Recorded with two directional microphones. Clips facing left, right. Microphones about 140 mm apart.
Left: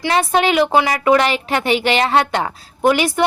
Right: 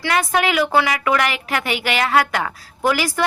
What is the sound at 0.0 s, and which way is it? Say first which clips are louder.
A woman's voice: left 3 dB; 25° left (ahead or behind).